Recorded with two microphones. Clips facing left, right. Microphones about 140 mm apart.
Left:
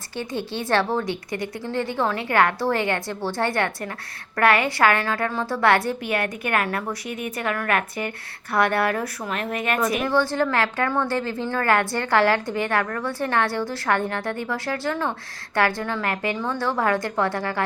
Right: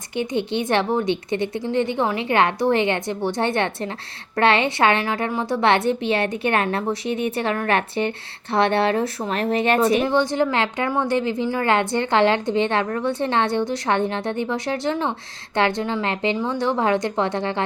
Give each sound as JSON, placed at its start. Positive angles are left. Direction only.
{"t": 0.2, "sound": "speech", "side_deg": -20}